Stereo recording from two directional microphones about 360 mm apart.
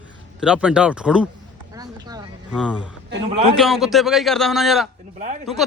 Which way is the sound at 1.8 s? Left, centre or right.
Centre.